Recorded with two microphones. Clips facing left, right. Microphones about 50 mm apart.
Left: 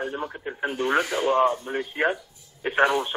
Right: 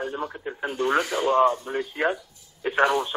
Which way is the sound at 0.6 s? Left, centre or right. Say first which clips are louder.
Even; left.